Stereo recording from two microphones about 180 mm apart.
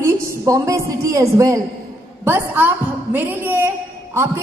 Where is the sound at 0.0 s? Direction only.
15° right (ahead or behind).